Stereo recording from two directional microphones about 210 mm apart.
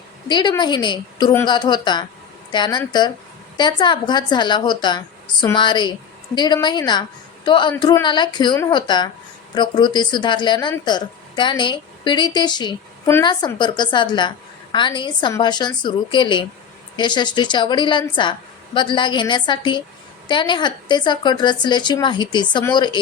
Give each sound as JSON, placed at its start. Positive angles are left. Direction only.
{"t": 0.3, "sound": "a man's voice", "side_deg": 20}